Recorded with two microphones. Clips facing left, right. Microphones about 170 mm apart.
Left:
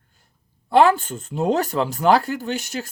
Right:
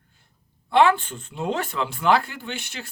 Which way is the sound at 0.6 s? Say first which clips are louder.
Left 3 dB; 40° left (ahead or behind).